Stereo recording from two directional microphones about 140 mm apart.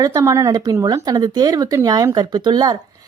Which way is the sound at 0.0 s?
25° right (ahead or behind).